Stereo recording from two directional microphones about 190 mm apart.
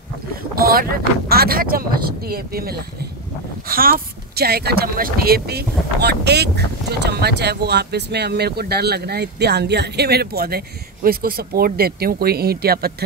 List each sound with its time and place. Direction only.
0.6 s boat: 50° right (ahead or behind)
1.3 s speech: 55° right (ahead or behind)